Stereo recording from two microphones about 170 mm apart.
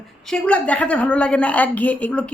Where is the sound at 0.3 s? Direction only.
5° left (ahead or behind).